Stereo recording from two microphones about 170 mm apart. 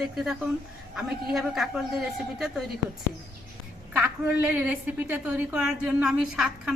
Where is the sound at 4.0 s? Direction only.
10° right (ahead or behind).